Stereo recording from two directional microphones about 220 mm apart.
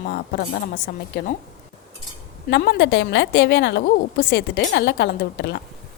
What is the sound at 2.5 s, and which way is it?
A woman's voice, 50° left (ahead or behind).